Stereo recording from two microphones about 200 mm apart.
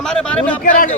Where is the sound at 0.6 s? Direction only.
40° left (ahead or behind).